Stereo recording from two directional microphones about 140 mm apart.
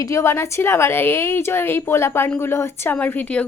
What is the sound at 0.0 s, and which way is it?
A woman's voice, 20° left (ahead or behind).